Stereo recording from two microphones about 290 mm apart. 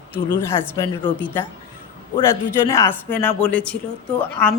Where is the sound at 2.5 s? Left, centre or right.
Centre.